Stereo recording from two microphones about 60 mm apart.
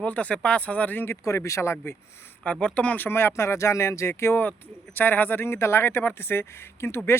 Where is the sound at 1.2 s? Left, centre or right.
Left.